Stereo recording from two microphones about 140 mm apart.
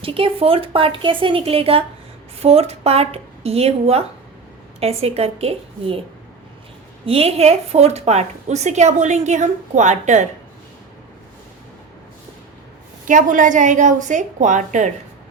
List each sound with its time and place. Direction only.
0.0 s a woman's voice: 40° right (ahead or behind)
7.0 s a woman's voice: 45° right (ahead or behind)
13.1 s a woman's voice: 65° right (ahead or behind)